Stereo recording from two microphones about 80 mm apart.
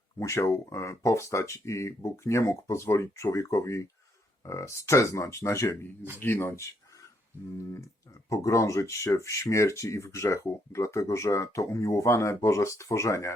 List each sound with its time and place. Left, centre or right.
0.2 s speech: left